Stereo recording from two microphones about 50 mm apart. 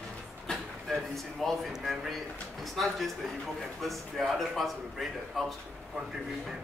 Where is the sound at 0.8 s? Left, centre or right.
Centre.